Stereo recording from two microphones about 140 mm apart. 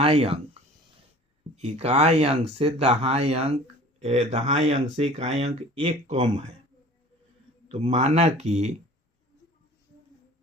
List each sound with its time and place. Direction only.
0.0 s speech: 40° right (ahead or behind)
7.7 s speech: 55° right (ahead or behind)